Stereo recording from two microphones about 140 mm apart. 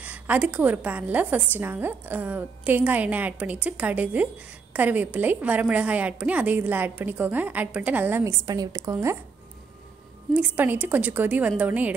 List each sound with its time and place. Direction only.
0.0 s a woman's voice: 10° right (ahead or behind)
10.3 s a woman's voice: 10° right (ahead or behind)